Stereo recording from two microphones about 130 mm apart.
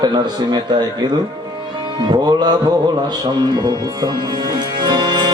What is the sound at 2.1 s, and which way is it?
Speech, 35° right (ahead or behind).